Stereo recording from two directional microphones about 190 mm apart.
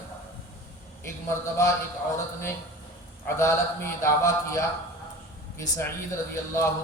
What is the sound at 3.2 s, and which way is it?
A man's voice, 15° left (ahead or behind).